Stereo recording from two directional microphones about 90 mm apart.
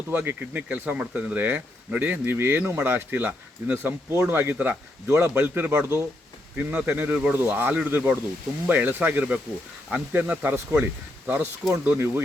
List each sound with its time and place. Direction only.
0.1 s speech: 15° right (ahead or behind)
4.5 s a man's voice: 15° right (ahead or behind)
5.0 s speech: 30° right (ahead or behind)
6.6 s a man's voice: 10° right (ahead or behind)